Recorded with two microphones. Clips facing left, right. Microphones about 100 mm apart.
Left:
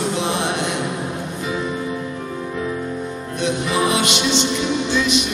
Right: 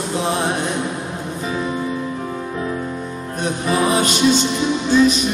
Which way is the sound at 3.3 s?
40° right (ahead or behind).